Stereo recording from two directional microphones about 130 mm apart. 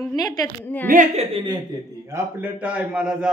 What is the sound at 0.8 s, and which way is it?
Speech, 90° right.